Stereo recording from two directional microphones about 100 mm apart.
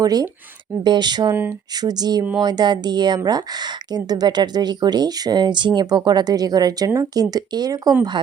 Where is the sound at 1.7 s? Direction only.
40° right (ahead or behind).